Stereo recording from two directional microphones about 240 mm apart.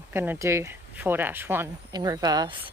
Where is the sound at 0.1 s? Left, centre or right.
Centre.